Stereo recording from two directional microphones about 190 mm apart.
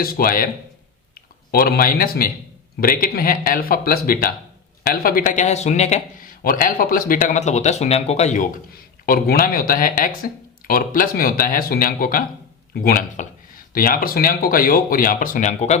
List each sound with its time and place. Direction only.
0.0 s a man's voice: 50° left (ahead or behind)